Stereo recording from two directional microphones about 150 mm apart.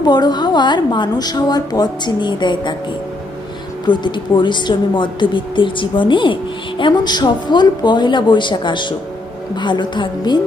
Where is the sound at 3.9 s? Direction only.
30° left (ahead or behind).